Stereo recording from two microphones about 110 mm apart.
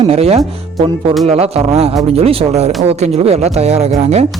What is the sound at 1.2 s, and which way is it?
Speech, 80° right.